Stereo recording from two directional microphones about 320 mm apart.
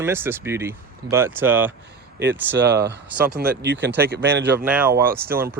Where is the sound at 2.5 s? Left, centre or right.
Right.